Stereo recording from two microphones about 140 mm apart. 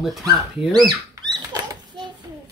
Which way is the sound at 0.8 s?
30° right (ahead or behind).